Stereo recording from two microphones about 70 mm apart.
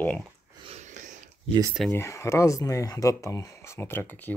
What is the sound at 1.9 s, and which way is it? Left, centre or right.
Speech, left.